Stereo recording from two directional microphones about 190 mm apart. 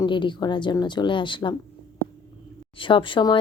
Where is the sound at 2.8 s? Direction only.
25° left (ahead or behind).